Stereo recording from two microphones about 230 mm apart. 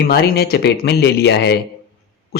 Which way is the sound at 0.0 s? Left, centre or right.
Left.